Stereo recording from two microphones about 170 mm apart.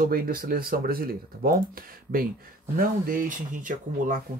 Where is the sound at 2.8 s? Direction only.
55° right (ahead or behind).